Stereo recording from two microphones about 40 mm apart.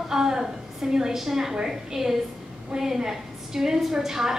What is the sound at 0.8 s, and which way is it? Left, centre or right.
A woman's voice, centre.